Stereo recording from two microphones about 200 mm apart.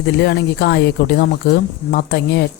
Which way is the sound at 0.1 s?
55° left (ahead or behind).